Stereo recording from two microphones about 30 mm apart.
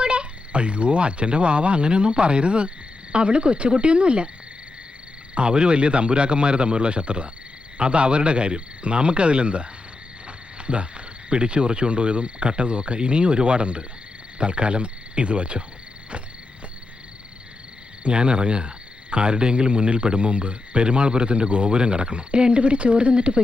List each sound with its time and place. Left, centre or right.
0.0 s speech: right
5.3 s speech: right
18.0 s speech: right